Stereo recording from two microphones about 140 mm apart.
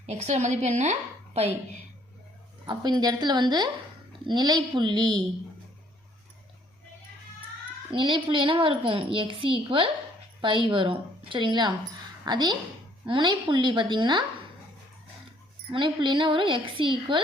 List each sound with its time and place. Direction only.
0.0 s a woman's voice: 50° right (ahead or behind)
2.6 s a child's voice: 30° right (ahead or behind)
7.9 s a child's voice: 35° right (ahead or behind)
15.7 s a child's voice: 35° right (ahead or behind)